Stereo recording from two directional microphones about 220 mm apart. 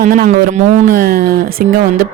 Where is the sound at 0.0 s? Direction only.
40° right (ahead or behind).